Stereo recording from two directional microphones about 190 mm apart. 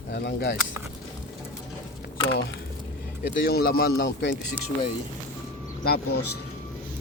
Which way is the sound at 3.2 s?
60° left (ahead or behind).